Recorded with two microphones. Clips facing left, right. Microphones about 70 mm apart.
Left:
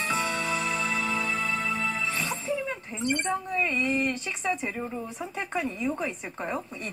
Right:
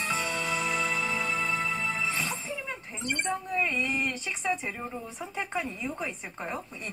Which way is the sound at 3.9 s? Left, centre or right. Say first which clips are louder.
Left 3 dB; centre.